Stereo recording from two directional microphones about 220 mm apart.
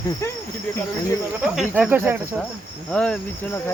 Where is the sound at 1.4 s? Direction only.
5° right (ahead or behind).